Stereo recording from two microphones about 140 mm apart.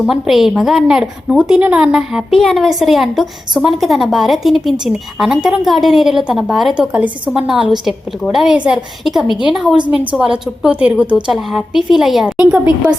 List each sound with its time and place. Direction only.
0.0 s a woman's voice: centre (ahead or behind)